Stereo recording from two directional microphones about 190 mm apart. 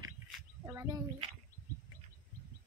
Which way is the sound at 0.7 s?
15° right (ahead or behind).